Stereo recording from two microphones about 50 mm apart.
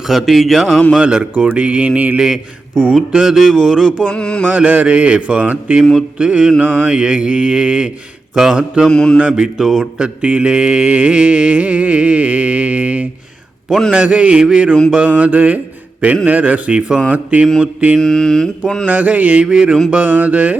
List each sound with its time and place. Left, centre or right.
0.1 s mantra: centre
0.9 s mantra: centre
2.1 s mantra: centre
4.1 s mantra: centre
4.4 s mantra: right
8.9 s mantra: centre
9.3 s mantra: centre
10.0 s mantra: right
15.1 s mantra: right
18.0 s mantra: centre
18.9 s mantra: right
19.9 s mantra: right